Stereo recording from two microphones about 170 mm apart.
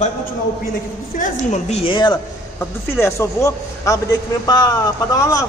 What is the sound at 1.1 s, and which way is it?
A woman's voice, 45° left (ahead or behind).